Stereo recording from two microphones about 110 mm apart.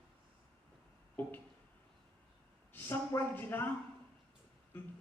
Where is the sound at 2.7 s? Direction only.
20° left (ahead or behind).